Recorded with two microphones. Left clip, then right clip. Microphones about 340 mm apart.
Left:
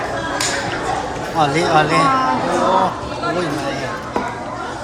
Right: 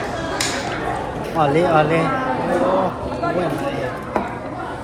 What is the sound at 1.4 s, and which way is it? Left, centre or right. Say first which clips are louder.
Speech: left 1 dB; centre.